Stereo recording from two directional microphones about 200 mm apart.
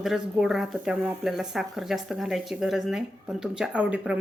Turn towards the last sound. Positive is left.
turn(degrees=-5)  # may be behind; listen again after turning